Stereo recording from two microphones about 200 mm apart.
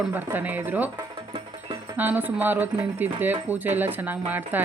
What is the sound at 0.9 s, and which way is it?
Music, 25° right (ahead or behind).